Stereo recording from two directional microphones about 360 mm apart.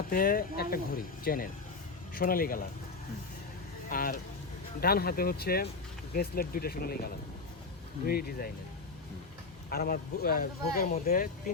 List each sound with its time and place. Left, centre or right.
0.1 s speech: left
3.8 s speech: left
9.6 s speech: left